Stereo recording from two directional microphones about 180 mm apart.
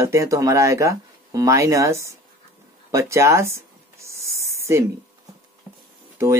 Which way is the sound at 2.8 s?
15° right (ahead or behind).